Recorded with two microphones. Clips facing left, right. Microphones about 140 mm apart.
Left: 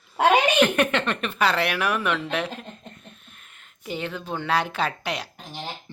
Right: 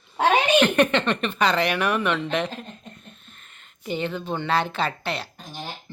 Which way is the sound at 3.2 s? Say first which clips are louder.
Right 1 dB; 5° left (ahead or behind).